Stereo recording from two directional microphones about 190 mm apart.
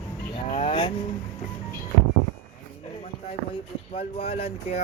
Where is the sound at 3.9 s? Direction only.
30° left (ahead or behind).